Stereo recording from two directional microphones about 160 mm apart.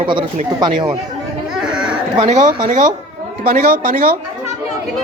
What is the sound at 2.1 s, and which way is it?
Speech, 45° right (ahead or behind).